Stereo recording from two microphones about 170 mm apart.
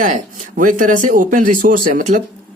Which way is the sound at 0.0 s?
50° right (ahead or behind).